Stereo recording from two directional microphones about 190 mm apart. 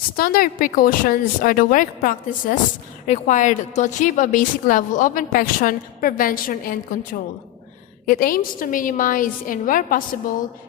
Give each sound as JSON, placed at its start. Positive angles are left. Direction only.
{"t": 0.2, "sound": "a woman's voice", "side_deg": 50}